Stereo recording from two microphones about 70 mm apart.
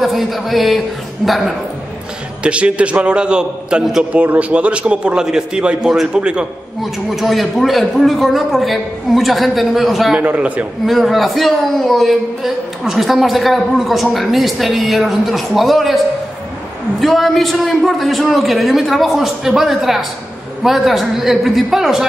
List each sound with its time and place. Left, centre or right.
0.0 s a man's voice: centre
2.4 s a man's voice: centre
4.1 s a man's voice: right
6.8 s a man's voice: centre
10.2 s a man's voice: right
10.9 s a man's voice: centre
17.0 s a man's voice: centre